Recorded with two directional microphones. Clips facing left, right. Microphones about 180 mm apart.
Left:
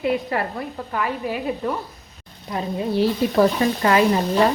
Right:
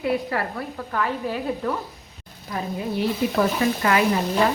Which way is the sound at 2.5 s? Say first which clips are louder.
Left 3 dB; 30° left (ahead or behind).